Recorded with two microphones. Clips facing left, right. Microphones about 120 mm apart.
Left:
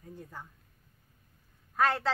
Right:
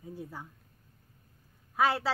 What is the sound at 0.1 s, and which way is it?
Speech, 5° right (ahead or behind).